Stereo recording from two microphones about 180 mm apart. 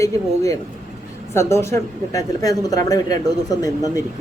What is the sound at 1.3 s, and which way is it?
Speech, 15° left (ahead or behind).